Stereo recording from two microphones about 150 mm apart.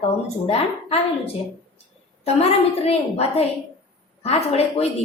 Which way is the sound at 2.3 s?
45° left (ahead or behind).